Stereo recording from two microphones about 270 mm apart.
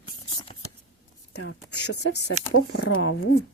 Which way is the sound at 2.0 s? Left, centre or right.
Left.